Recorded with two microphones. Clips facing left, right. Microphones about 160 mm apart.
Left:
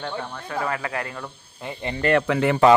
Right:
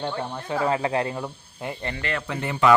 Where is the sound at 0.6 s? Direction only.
25° right (ahead or behind).